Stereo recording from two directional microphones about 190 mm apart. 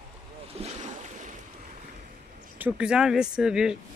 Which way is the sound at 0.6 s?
40° right (ahead or behind).